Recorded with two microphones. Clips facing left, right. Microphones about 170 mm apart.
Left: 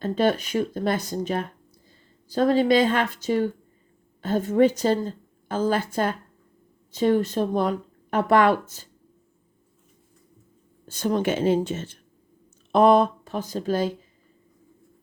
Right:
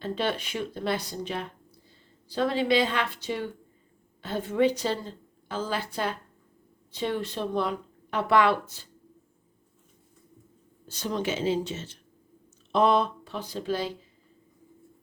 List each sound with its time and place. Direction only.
0.0 s a woman's voice: 45° left (ahead or behind)
10.8 s a woman's voice: 50° left (ahead or behind)